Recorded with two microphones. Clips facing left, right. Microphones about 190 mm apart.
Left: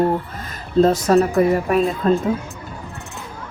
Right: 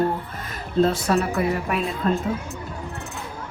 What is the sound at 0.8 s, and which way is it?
A woman's voice, 40° left (ahead or behind).